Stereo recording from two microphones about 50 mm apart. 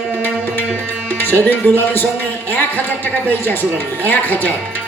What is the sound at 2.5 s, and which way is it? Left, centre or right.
Music, left.